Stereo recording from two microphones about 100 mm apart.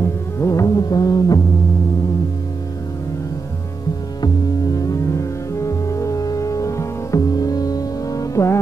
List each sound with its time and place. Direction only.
0.4 s music: 35° left (ahead or behind)
4.7 s music: 30° left (ahead or behind)